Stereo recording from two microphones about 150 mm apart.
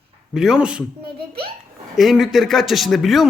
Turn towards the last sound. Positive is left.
turn(degrees=0)  # may be behind; listen again after turning